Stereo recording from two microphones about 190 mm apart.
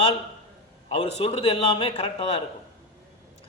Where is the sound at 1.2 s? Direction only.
30° left (ahead or behind).